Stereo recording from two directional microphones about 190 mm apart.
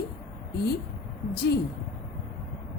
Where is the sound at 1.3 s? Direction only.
60° left (ahead or behind).